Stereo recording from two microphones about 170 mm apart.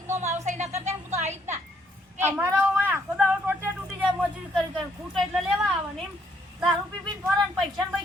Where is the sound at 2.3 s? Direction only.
10° right (ahead or behind).